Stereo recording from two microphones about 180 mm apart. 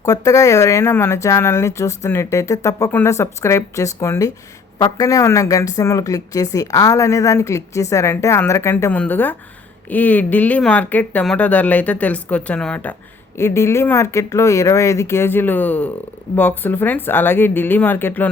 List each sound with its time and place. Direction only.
0.0 s speech: 20° left (ahead or behind)